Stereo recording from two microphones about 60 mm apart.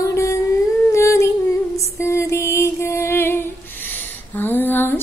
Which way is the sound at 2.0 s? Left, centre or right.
Left.